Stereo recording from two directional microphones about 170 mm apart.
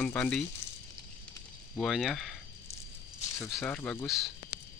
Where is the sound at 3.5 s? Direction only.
10° left (ahead or behind).